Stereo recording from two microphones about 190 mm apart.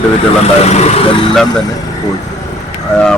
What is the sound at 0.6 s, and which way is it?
Speech, 35° left (ahead or behind).